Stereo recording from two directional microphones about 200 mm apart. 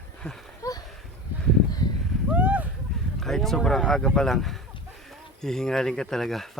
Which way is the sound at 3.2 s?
Centre (ahead or behind).